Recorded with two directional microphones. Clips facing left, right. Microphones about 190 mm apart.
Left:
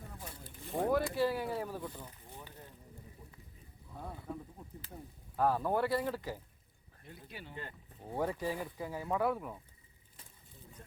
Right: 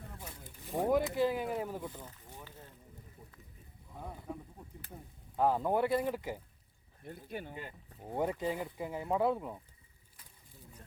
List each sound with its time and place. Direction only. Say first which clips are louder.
0.8 s speech: right 1 dB; 20° right (ahead or behind)
2.0 s a sound: even; 15° left (ahead or behind)
3.9 s speech: even; 15° right (ahead or behind)
5.4 s speech: right 1 dB; 20° right (ahead or behind)
7.0 s speech: right 7 dB; 50° right (ahead or behind)
7.5 s speech: right 1 dB; 10° right (ahead or behind)